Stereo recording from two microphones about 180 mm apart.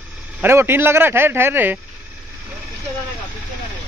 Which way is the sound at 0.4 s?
10° right (ahead or behind).